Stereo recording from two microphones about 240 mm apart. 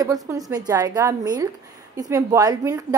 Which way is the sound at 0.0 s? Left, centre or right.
Centre.